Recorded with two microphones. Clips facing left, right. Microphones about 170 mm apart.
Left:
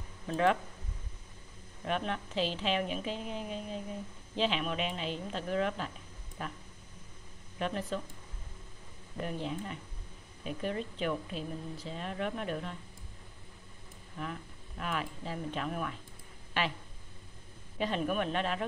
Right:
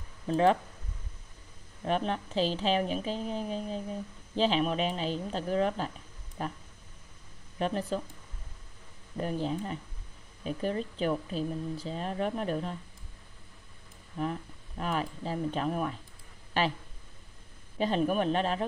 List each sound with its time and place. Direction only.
0.3 s a woman's voice: 30° right (ahead or behind)
1.9 s a woman's voice: 35° right (ahead or behind)
9.1 s a woman's voice: 35° right (ahead or behind)
14.1 s a woman's voice: 35° right (ahead or behind)
17.7 s a woman's voice: 35° right (ahead or behind)